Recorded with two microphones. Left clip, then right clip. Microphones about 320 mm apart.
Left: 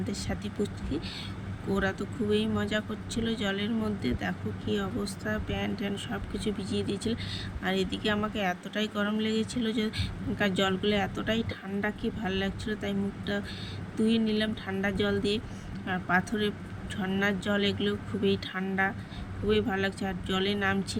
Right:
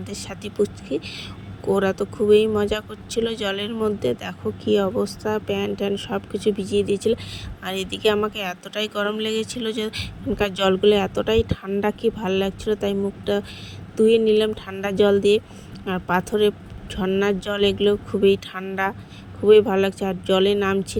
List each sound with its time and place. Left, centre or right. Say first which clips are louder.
0.0 s speech: right 3 dB; centre